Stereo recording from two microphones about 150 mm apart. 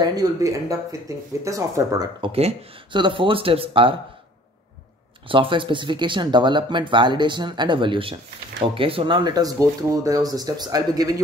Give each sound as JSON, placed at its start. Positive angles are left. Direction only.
{"t": 0.0, "sound": "speech", "side_deg": -25}
{"t": 2.3, "sound": "speech", "side_deg": -35}
{"t": 5.3, "sound": "speech", "side_deg": -35}